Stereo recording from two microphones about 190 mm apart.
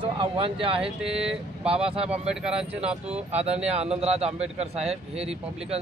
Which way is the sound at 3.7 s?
35° right (ahead or behind).